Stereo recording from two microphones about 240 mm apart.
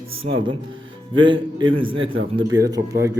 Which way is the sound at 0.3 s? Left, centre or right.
Right.